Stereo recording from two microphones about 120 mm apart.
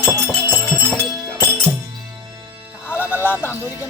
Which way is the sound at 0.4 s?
20° right (ahead or behind).